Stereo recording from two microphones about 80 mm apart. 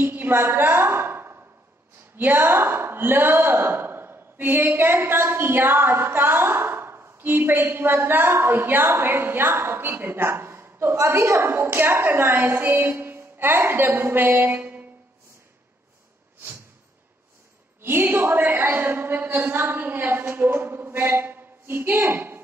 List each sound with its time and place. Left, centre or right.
0.0 s a sound: right
2.1 s a woman's voice: right
17.8 s a woman's voice: right